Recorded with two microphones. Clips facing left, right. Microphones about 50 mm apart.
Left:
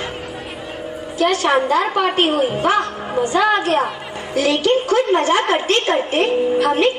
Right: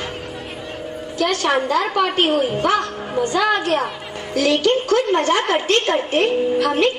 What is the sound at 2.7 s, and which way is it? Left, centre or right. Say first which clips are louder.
Music: left 2 dB; left.